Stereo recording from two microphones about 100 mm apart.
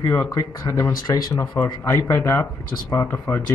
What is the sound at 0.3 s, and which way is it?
Speech, 35° left (ahead or behind).